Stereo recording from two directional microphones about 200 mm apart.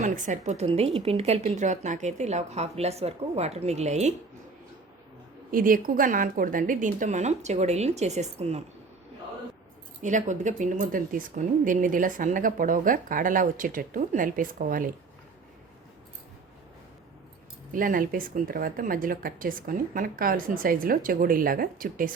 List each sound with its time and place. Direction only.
0.0 s a woman's voice: 40° right (ahead or behind)
5.5 s a woman's voice: 45° right (ahead or behind)
10.0 s a woman's voice: 40° right (ahead or behind)
17.7 s a woman's voice: 45° right (ahead or behind)